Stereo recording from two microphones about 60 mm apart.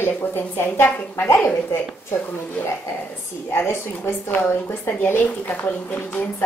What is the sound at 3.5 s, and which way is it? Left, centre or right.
A woman's voice, left.